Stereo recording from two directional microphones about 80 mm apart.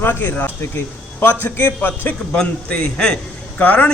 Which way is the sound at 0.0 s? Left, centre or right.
Left.